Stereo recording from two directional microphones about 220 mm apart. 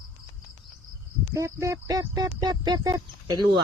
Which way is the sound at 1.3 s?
15° right (ahead or behind).